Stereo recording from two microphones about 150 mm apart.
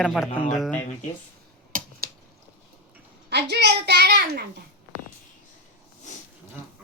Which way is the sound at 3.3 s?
90° right.